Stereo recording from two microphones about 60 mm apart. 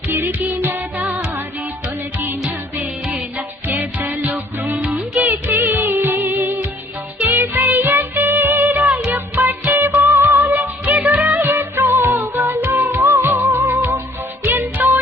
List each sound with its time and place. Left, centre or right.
0.1 s music: right
3.2 s music: right
5.3 s music: right
10.9 s music: right
11.3 s music: right